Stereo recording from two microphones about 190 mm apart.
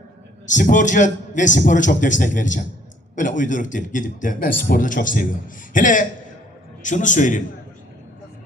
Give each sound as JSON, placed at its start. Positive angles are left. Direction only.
{"t": 0.4, "sound": "a man's voice", "side_deg": 40}